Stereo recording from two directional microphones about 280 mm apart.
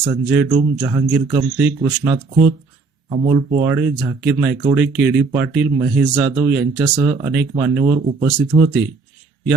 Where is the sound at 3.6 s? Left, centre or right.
Centre.